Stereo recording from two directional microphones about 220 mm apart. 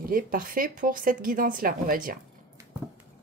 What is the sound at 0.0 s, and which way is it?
A woman's voice, 40° right (ahead or behind).